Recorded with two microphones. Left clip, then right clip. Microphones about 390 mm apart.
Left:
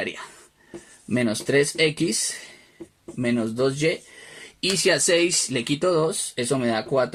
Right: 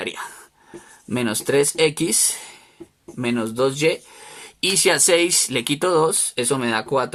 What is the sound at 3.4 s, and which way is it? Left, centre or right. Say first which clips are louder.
Speech: right 4 dB; right.